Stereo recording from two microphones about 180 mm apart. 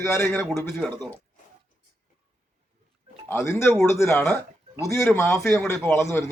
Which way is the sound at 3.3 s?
10° left (ahead or behind).